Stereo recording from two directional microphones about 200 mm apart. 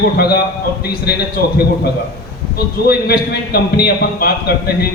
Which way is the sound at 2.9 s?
50° left (ahead or behind).